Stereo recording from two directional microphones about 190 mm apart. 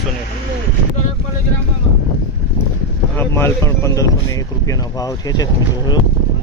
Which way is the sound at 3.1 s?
10° left (ahead or behind).